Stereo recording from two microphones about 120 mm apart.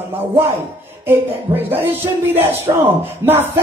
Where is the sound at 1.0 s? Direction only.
20° right (ahead or behind).